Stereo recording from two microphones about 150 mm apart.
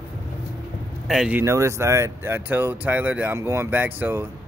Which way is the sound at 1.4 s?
20° right (ahead or behind).